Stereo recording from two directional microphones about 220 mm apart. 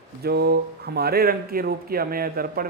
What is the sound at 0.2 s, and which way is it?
A man's voice, 45° right (ahead or behind).